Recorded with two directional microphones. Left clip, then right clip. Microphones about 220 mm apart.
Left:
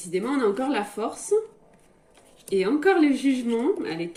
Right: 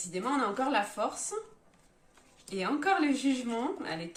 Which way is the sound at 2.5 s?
40° right (ahead or behind).